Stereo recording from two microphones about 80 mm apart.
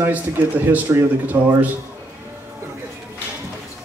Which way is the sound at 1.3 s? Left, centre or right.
Right.